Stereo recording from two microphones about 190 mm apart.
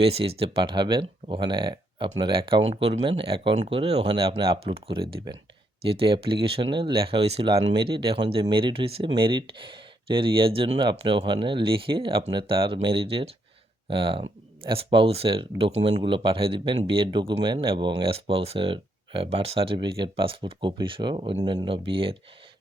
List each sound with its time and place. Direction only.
0.0 s speech: 30° right (ahead or behind)